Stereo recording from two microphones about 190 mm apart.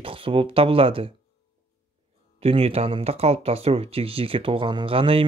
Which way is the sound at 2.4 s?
30° right (ahead or behind).